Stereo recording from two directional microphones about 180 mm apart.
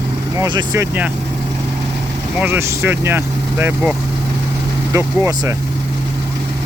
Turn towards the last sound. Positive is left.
turn(degrees=-15)  # may be behind; listen again after turning